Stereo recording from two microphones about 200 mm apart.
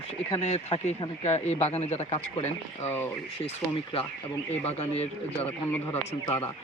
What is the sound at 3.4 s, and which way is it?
Speech, 30° left (ahead or behind).